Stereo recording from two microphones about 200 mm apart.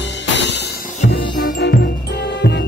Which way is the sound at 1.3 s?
45° left (ahead or behind).